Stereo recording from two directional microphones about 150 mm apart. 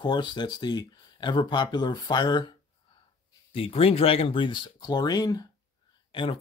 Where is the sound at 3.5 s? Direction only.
40° left (ahead or behind).